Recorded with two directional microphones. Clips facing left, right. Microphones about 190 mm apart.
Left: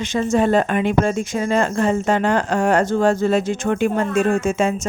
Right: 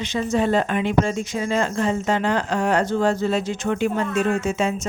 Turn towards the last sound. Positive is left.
turn(degrees=50)  # may be behind; listen again after turning